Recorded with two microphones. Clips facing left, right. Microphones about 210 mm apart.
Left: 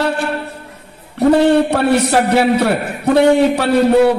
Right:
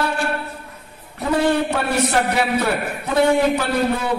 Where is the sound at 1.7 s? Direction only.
70° left (ahead or behind).